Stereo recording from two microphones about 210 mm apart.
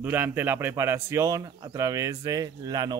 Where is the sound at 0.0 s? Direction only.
10° right (ahead or behind).